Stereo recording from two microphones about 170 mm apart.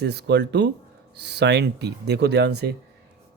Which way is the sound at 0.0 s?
75° right (ahead or behind).